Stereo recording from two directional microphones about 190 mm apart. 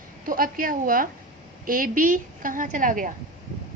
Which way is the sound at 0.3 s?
45° right (ahead or behind).